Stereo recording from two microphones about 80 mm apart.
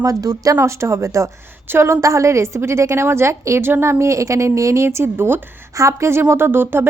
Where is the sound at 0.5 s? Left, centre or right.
Right.